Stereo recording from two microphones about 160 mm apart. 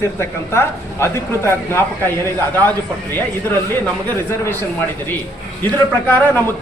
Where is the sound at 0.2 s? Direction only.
15° left (ahead or behind).